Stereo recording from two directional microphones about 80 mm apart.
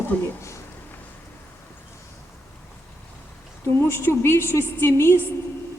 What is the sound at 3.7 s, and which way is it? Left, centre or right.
A woman's voice, left.